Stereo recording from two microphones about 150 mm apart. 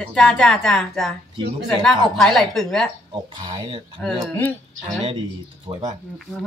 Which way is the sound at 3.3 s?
30° right (ahead or behind).